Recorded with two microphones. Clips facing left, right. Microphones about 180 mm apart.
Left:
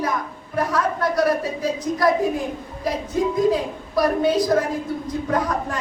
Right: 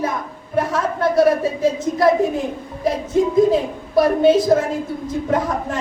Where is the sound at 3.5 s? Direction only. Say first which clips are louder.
Right 3 dB; 25° right (ahead or behind).